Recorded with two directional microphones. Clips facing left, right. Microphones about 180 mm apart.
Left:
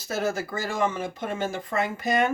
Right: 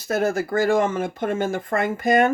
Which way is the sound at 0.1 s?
50° right (ahead or behind).